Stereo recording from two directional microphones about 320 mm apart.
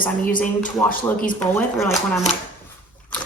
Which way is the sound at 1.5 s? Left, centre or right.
Centre.